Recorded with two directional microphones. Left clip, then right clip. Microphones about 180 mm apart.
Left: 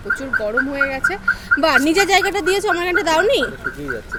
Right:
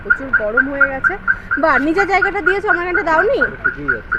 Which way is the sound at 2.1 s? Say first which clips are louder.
Right 1 dB; 50° left (ahead or behind).